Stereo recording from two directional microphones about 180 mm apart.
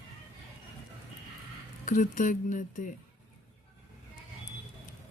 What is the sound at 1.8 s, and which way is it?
A woman's voice, 45° left (ahead or behind).